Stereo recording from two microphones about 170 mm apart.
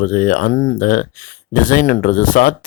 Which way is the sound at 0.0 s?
50° left (ahead or behind).